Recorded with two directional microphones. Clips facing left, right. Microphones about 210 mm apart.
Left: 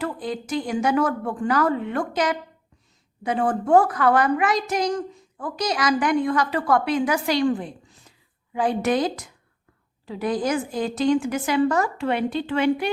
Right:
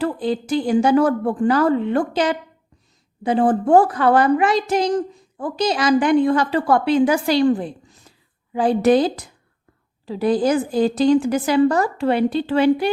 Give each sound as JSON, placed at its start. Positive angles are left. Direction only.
{"t": 0.0, "sound": "a woman's voice", "side_deg": -30}